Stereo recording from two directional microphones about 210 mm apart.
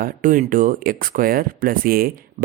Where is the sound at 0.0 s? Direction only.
40° right (ahead or behind).